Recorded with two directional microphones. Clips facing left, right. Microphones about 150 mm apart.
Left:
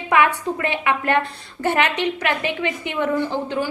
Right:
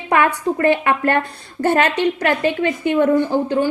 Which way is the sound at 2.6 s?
45° right (ahead or behind).